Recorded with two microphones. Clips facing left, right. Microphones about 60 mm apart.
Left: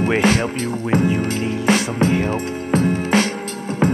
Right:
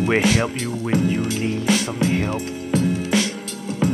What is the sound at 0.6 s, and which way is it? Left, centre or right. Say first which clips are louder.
Speech: left 3 dB; left.